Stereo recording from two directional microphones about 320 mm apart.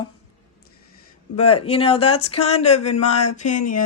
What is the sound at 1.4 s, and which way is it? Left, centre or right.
Speech, centre.